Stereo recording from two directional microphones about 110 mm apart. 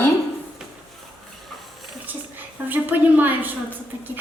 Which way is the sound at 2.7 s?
15° right (ahead or behind).